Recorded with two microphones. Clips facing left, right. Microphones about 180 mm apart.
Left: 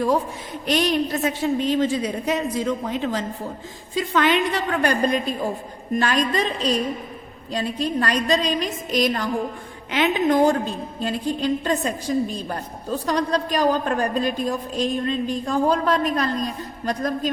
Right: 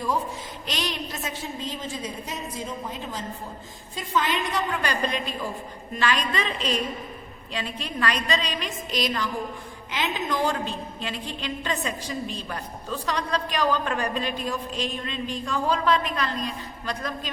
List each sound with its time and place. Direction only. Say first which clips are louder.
0.7 s a woman's voice: left 11 dB; 55° left (ahead or behind)